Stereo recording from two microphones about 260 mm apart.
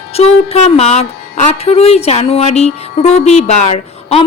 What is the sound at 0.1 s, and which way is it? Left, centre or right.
Speech, left.